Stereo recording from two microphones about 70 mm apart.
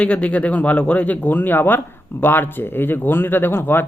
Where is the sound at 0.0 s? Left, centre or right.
Centre.